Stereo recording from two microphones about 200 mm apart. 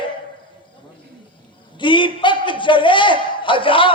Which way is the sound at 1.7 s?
25° left (ahead or behind).